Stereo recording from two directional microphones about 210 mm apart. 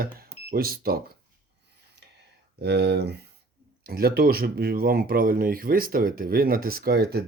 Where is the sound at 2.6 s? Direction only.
50° right (ahead or behind).